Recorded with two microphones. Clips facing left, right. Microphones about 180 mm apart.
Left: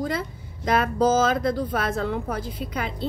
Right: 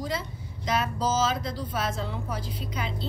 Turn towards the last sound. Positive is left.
turn(degrees=55)  # may be behind; listen again after turning